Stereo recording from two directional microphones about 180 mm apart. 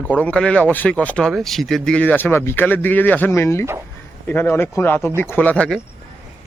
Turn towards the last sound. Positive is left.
turn(degrees=5)  # may be behind; listen again after turning